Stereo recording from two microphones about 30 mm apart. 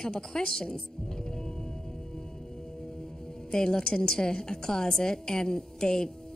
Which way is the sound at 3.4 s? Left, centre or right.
Left.